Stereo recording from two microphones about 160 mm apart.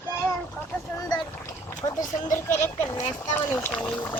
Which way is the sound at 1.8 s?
35° left (ahead or behind).